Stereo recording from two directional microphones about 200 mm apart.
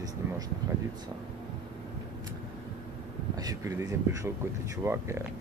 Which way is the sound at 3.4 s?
15° right (ahead or behind).